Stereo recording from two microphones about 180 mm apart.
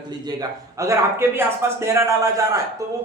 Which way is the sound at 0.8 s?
15° right (ahead or behind).